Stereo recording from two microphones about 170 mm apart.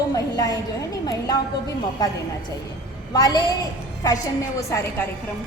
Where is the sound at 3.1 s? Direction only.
20° left (ahead or behind).